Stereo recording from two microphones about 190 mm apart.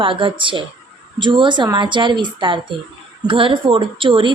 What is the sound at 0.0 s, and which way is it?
A woman's voice, 25° right (ahead or behind).